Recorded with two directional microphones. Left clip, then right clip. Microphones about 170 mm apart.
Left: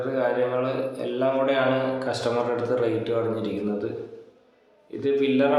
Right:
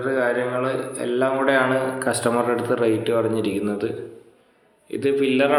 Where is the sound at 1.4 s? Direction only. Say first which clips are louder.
Right 3 dB; 25° right (ahead or behind).